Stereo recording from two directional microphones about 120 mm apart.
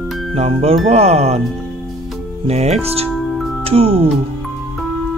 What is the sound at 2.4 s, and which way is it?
Speech, 65° right (ahead or behind).